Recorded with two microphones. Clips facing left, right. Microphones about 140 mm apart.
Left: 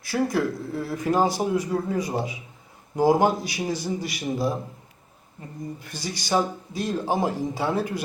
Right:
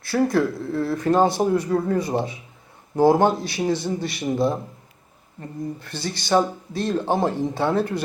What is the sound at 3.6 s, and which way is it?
Speech, 25° right (ahead or behind).